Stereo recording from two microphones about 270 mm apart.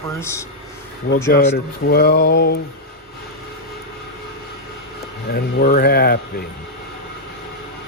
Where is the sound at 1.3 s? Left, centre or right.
Left.